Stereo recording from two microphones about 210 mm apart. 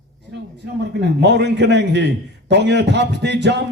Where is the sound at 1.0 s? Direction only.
55° right (ahead or behind).